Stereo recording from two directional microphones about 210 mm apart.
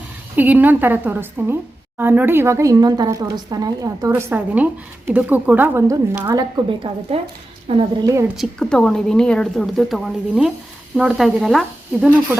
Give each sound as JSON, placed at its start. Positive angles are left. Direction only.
{"t": 0.3, "sound": "a woman's voice", "side_deg": -10}
{"t": 8.4, "sound": "a woman's voice", "side_deg": 5}